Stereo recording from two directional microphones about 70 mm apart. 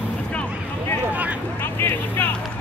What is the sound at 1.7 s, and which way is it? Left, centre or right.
Vehicle, left.